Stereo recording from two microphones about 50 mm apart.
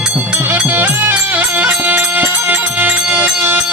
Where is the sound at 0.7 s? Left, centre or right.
Right.